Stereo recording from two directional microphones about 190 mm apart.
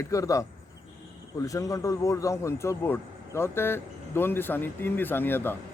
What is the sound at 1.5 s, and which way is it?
A man's voice, 15° left (ahead or behind).